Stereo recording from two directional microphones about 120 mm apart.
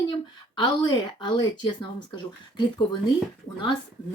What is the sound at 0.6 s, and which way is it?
Speech, 40° left (ahead or behind).